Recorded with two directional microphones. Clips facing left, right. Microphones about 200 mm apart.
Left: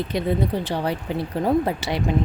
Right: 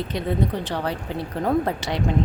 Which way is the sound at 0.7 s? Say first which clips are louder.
Left 2 dB; 10° left (ahead or behind).